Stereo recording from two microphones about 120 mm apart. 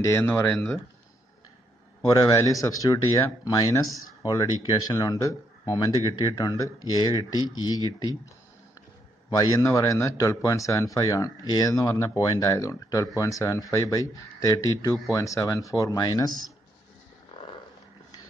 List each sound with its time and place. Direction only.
0.0 s speech: 25° left (ahead or behind)
2.0 s speech: 30° left (ahead or behind)
9.4 s speech: 30° left (ahead or behind)